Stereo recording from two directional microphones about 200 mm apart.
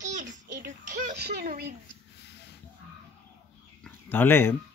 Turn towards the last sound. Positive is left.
turn(degrees=10)  # may be behind; listen again after turning